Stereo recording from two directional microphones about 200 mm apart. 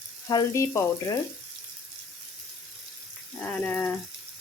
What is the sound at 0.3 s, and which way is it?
Frying, 15° left (ahead or behind).